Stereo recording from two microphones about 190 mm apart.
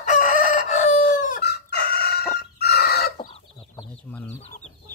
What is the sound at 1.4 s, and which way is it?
Chicken, 60° left (ahead or behind).